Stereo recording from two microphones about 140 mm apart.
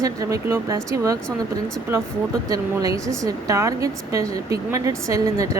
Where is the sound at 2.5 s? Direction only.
25° right (ahead or behind).